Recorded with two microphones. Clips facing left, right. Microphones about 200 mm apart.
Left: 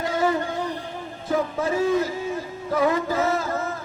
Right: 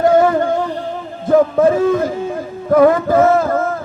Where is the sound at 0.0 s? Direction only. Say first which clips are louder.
Right 11 dB; 55° right (ahead or behind).